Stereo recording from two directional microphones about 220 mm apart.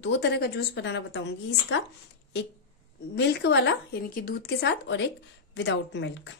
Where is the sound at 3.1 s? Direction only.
50° left (ahead or behind).